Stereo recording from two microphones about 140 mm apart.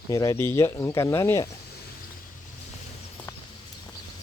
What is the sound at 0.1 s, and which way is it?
Speech, 25° left (ahead or behind).